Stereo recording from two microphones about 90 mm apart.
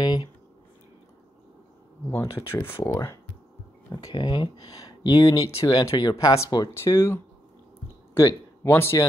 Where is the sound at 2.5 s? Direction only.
25° left (ahead or behind).